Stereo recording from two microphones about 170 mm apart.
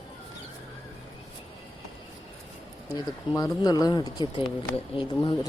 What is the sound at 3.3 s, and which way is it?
Speech, 25° left (ahead or behind).